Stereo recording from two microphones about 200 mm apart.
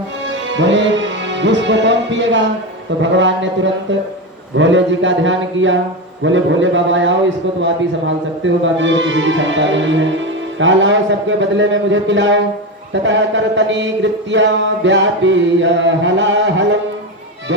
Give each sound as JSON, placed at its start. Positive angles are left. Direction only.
{"t": 0.3, "sound": "music", "side_deg": -65}
{"t": 3.0, "sound": "speech", "side_deg": -65}
{"t": 14.8, "sound": "music", "side_deg": -65}